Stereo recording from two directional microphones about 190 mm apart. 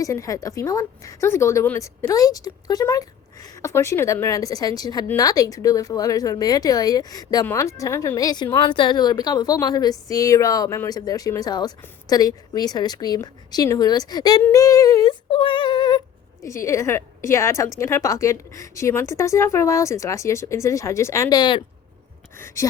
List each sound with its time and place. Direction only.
0.0 s speech: 15° left (ahead or behind)